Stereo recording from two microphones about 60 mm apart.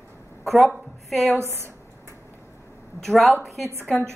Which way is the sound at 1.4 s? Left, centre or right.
Right.